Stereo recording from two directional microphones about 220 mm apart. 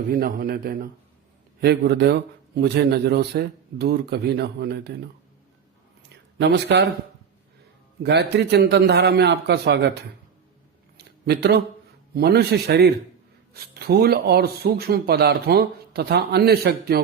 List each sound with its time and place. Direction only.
0.1 s a man's voice: 40° right (ahead or behind)
6.4 s speech: 50° right (ahead or behind)
8.0 s speech: 50° right (ahead or behind)
10.9 s a sound: 45° right (ahead or behind)
12.1 s speech: 45° right (ahead or behind)